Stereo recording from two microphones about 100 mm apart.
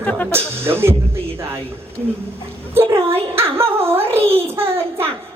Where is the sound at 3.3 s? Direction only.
25° right (ahead or behind).